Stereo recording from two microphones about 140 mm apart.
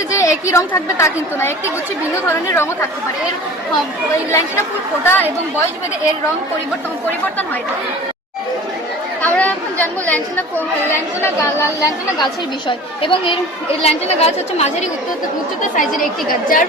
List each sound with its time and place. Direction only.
0.2 s a woman's voice: 20° left (ahead or behind)
4.1 s a woman's voice: 20° left (ahead or behind)
9.2 s chatter: 10° left (ahead or behind)
11.8 s a woman's voice: 35° left (ahead or behind)
15.6 s a woman's voice: 70° left (ahead or behind)